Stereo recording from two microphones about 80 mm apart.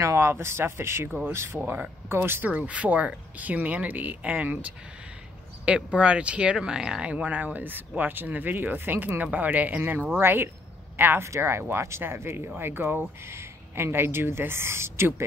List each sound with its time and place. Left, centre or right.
0.0 s speech: right
1.6 s speech: centre
2.0 s speech: right
2.5 s speech: centre; by 15.2 s right